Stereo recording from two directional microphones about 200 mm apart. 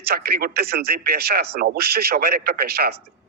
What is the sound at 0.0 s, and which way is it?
Speech, 50° right (ahead or behind).